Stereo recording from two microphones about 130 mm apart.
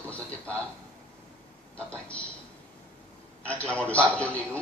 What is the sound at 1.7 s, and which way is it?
Speech, 10° left (ahead or behind).